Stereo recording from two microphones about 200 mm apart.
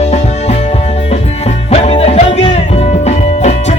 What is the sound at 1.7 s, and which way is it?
Music, 30° left (ahead or behind).